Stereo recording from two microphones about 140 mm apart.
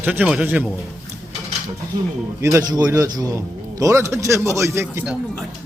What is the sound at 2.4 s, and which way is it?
A man's voice, 25° right (ahead or behind).